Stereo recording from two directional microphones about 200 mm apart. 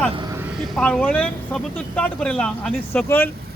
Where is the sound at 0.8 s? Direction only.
5° left (ahead or behind).